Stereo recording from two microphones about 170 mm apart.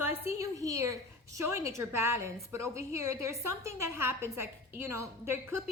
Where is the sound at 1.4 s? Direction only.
15° right (ahead or behind).